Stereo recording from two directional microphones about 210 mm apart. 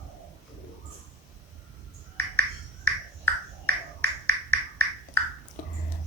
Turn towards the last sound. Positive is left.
turn(degrees=10)  # may be behind; listen again after turning